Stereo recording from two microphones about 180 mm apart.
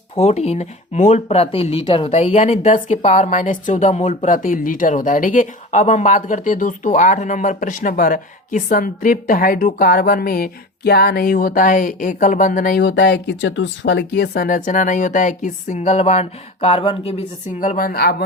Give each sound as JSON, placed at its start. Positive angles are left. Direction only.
{"t": 0.2, "sound": "speech", "side_deg": 35}
{"t": 12.8, "sound": "speech", "side_deg": 70}
{"t": 17.6, "sound": "speech", "side_deg": 50}